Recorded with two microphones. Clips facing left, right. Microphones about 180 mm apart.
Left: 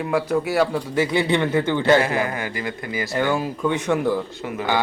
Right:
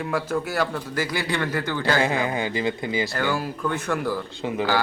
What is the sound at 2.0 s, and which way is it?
Speech, 25° right (ahead or behind).